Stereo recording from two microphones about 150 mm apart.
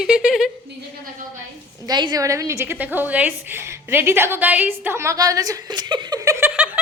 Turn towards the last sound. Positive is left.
turn(degrees=-10)  # may be behind; listen again after turning